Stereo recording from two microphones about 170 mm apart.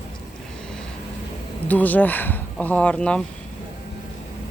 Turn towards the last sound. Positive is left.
turn(degrees=5)  # may be behind; listen again after turning